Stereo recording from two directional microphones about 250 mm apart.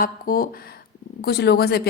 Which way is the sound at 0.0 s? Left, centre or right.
Left.